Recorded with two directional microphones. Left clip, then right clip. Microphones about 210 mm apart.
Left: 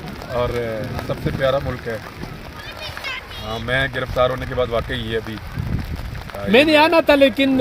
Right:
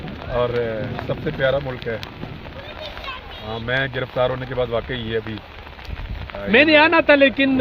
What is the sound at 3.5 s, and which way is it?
Speech, 5° left (ahead or behind).